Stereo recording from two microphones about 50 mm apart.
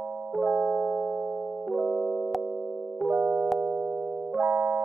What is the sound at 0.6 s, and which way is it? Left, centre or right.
Music, centre.